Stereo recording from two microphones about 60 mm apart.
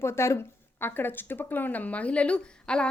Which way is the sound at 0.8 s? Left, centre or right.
Left.